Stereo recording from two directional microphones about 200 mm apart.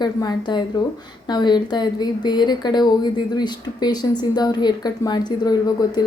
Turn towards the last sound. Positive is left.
turn(degrees=20)  # may be behind; listen again after turning